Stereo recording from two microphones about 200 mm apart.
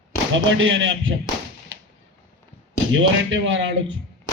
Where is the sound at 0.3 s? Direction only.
70° right (ahead or behind).